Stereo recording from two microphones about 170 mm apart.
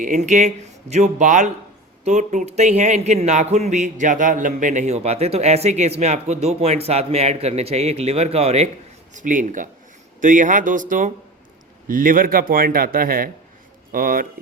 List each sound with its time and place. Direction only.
0.0 s a man's voice: 45° right (ahead or behind)
9.1 s a man's voice: 50° right (ahead or behind)